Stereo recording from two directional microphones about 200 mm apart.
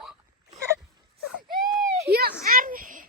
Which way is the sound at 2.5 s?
45° right (ahead or behind).